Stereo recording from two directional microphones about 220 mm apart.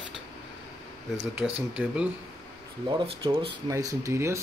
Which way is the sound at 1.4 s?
Centre (ahead or behind).